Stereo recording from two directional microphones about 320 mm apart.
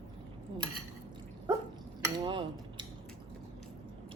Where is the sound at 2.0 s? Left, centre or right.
Centre.